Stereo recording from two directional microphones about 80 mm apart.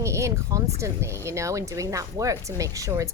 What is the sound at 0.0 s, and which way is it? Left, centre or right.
Speech, right.